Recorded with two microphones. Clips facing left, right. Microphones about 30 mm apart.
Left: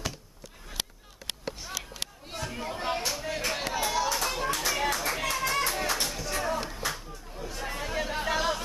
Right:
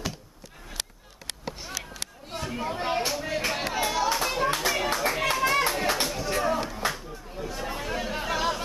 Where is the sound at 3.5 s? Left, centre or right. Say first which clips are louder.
Left 1 dB; centre.